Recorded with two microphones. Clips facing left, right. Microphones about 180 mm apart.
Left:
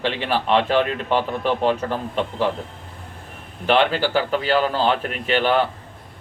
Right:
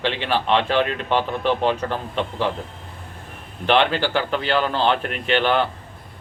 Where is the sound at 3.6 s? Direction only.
5° left (ahead or behind).